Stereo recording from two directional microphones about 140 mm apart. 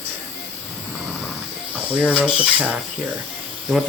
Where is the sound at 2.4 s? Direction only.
10° right (ahead or behind).